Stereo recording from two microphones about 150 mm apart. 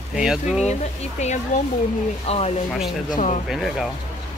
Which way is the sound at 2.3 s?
45° left (ahead or behind).